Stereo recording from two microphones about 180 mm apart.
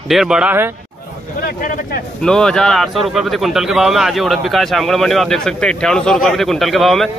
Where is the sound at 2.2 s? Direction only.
5° left (ahead or behind).